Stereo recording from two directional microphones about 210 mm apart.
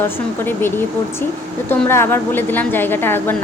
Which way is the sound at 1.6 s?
10° left (ahead or behind).